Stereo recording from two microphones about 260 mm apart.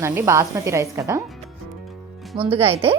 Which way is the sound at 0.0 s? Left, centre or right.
Centre.